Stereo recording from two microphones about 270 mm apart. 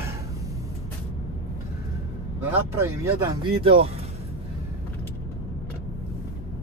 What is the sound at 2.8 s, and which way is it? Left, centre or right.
Speech, centre.